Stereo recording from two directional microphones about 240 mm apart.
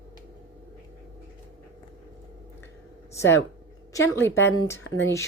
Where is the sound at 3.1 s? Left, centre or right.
Centre.